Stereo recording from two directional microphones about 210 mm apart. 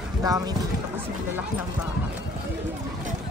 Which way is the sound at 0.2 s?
15° right (ahead or behind).